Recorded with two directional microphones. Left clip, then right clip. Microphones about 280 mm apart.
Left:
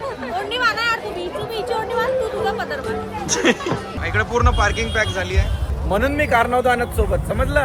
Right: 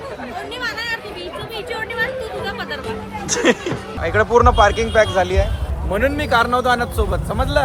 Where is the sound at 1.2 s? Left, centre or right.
Left.